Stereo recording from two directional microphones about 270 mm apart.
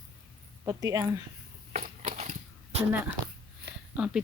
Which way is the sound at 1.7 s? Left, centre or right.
Right.